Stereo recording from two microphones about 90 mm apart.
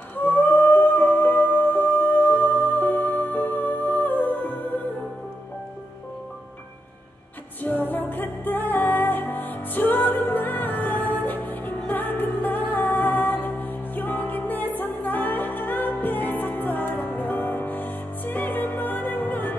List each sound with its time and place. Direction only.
0.1 s music: 20° left (ahead or behind)
7.6 s music: 20° left (ahead or behind)